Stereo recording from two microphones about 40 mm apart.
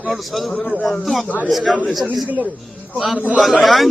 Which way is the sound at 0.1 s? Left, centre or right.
Centre.